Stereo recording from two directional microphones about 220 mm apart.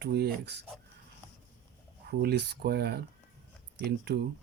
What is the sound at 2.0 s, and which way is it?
Speech, 45° right (ahead or behind).